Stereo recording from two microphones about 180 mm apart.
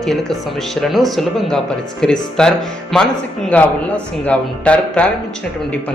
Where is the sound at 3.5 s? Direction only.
5° left (ahead or behind).